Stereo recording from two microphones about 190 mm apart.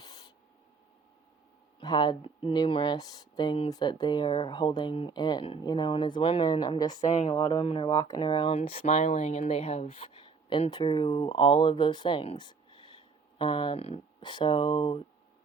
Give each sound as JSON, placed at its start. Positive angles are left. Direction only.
{"t": 0.0, "sound": "spray", "side_deg": 20}
{"t": 1.8, "sound": "speech", "side_deg": 20}
{"t": 7.0, "sound": "speech", "side_deg": 35}